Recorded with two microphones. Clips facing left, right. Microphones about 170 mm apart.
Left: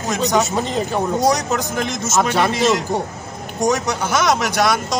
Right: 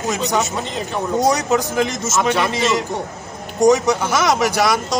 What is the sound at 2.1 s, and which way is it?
Speech, 35° left (ahead or behind).